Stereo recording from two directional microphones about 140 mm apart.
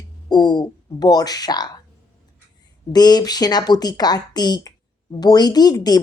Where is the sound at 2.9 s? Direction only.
30° left (ahead or behind).